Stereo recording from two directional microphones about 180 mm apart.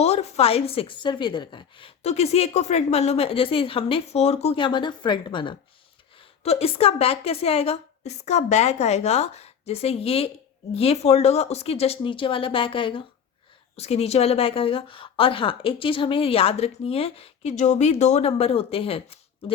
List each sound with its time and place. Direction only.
0.0 s a woman's voice: 35° left (ahead or behind)